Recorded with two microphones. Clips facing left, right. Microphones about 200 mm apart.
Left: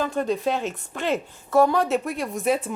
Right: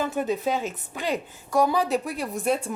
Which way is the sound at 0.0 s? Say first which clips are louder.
Left 2 dB; 5° right (ahead or behind).